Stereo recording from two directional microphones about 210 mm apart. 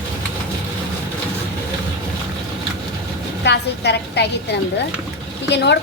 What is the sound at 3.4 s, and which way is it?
A woman's voice, 55° left (ahead or behind).